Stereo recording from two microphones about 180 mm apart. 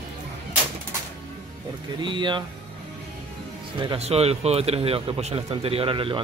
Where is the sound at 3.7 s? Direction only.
30° right (ahead or behind).